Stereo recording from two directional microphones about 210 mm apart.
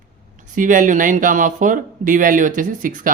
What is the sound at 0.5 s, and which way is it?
Speech, 40° right (ahead or behind).